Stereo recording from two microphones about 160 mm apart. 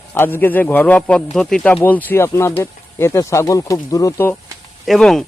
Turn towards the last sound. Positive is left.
turn(degrees=0)  # may be behind; listen again after turning